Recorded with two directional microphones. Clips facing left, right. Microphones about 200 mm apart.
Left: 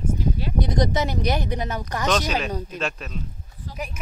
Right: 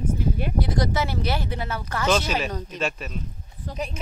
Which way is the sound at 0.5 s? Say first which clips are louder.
Left 4 dB; 20° left (ahead or behind).